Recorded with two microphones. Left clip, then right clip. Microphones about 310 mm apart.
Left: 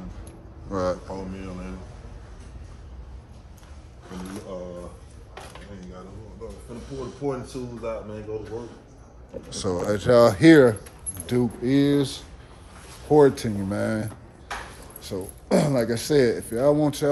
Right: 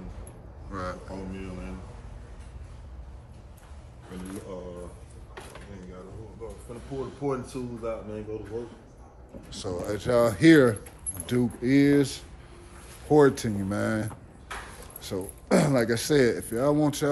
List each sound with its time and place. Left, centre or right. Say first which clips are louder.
0.7 s a man's voice: left 9 dB; centre
4.1 s speech: left 3 dB; centre
6.9 s speech: left 1 dB; centre
9.5 s speech: left 6 dB; left
10.3 s speech: left 4 dB; centre